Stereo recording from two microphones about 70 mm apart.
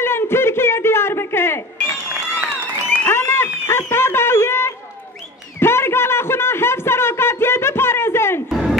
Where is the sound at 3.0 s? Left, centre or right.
Left.